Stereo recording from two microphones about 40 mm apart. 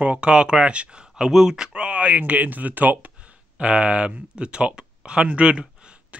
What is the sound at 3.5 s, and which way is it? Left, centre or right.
Speech, right.